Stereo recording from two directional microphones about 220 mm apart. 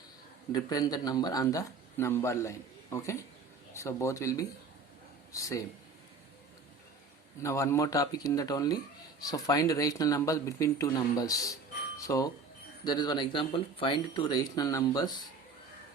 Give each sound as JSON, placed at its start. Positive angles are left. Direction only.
{"t": 0.5, "sound": "speech", "side_deg": 15}
{"t": 7.4, "sound": "speech", "side_deg": 15}